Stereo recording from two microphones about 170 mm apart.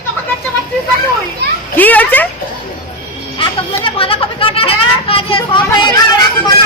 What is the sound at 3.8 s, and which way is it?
Speech, 30° left (ahead or behind).